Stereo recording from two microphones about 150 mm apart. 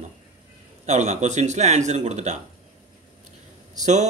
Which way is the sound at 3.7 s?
55° right (ahead or behind).